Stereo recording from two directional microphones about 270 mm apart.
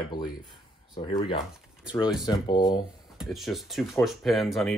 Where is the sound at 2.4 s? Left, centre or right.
Centre.